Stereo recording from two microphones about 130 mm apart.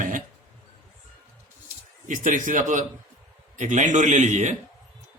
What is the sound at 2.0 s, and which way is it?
A man's voice, 75° right (ahead or behind).